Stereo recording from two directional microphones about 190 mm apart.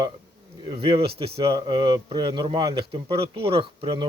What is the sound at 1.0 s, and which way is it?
Speech, 55° right (ahead or behind).